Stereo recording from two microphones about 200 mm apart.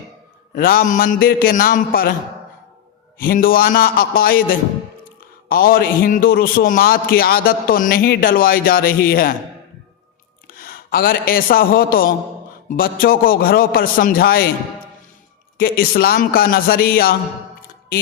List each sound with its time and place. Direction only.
0.5 s a man's voice: 45° left (ahead or behind)
3.2 s a man's voice: 45° left (ahead or behind)
10.4 s a man's voice: 45° left (ahead or behind)
15.5 s a man's voice: 50° left (ahead or behind)